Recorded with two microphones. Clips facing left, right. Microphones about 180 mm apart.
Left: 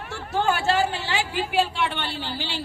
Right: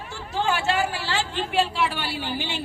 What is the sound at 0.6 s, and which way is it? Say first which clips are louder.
Speech: left 2 dB; 30° left (ahead or behind).